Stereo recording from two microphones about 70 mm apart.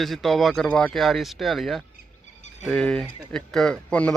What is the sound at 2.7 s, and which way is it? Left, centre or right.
Speech, centre.